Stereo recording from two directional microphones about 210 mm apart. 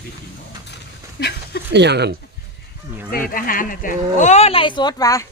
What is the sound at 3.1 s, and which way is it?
Speech, 45° left (ahead or behind).